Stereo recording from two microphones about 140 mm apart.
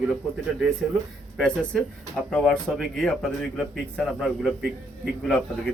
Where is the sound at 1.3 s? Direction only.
5° left (ahead or behind).